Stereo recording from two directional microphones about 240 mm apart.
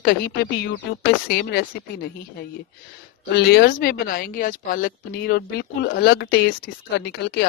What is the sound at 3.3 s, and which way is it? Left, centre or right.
A woman's voice, left.